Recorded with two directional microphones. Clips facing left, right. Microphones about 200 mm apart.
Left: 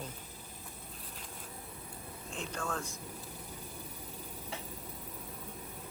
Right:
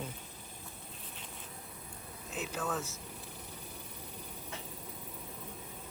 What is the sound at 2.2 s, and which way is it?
Speech, 5° right (ahead or behind).